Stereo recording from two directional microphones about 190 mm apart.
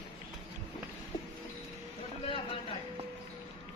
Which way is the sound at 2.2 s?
30° left (ahead or behind).